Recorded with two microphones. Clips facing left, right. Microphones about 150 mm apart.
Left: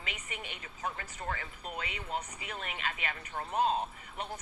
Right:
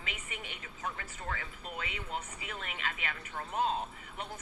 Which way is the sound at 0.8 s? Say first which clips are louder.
Left 2 dB; 35° left (ahead or behind).